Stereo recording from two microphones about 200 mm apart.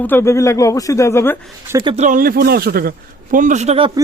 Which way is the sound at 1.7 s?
20° right (ahead or behind).